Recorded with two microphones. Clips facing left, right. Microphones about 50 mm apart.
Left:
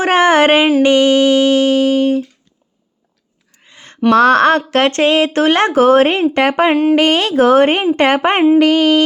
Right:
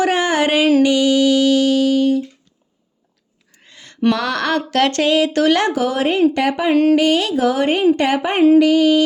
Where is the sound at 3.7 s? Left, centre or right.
Left.